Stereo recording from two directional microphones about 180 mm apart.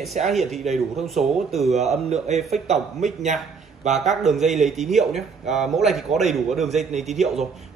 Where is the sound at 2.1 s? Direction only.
35° right (ahead or behind).